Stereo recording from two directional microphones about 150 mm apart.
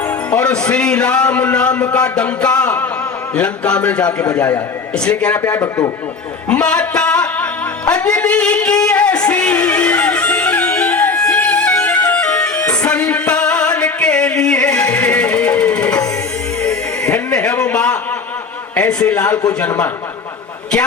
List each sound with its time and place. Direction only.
0.3 s a man's voice: 5° left (ahead or behind)
5.5 s a man's voice: 20° left (ahead or behind)
6.5 s a sound: 5° left (ahead or behind)
17.3 s a man's voice: 5° left (ahead or behind)